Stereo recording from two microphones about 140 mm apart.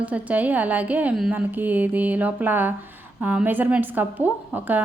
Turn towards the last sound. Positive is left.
turn(degrees=-15)  # may be behind; listen again after turning